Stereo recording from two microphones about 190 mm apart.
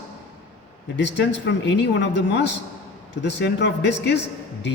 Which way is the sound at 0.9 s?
65° left (ahead or behind).